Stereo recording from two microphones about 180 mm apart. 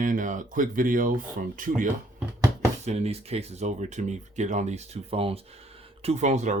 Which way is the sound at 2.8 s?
35° right (ahead or behind).